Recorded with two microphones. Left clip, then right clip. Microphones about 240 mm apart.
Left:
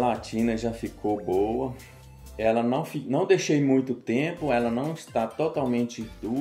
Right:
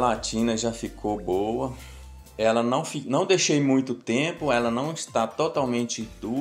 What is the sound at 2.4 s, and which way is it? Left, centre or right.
Speech, centre.